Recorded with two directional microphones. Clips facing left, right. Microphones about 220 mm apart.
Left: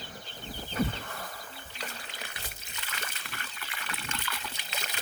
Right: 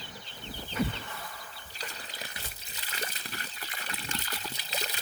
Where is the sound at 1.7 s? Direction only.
35° right (ahead or behind).